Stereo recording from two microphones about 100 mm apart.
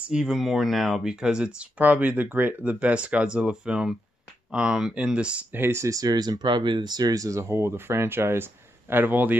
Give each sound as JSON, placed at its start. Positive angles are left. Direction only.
{"t": 0.0, "sound": "speech", "side_deg": -5}